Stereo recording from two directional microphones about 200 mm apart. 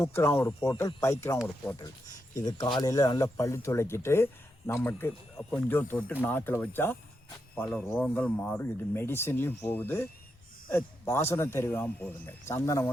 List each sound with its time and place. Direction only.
0.0 s speech: 15° left (ahead or behind)
2.4 s speech: 20° left (ahead or behind)